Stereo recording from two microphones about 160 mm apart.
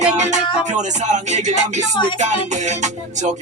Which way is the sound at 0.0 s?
45° right (ahead or behind).